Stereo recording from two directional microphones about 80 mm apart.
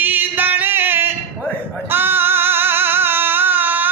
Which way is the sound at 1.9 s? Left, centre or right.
Right.